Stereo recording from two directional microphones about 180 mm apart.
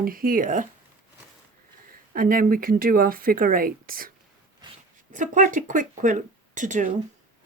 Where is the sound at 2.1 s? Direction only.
50° right (ahead or behind).